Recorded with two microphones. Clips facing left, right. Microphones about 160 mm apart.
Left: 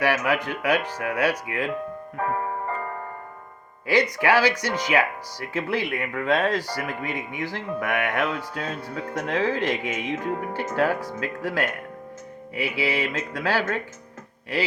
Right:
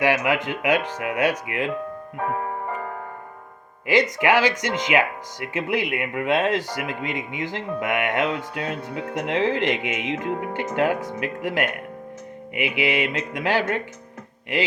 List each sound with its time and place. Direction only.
0.0 s speech: 20° right (ahead or behind)
2.2 s music: 15° right (ahead or behind)
3.8 s speech: 20° right (ahead or behind)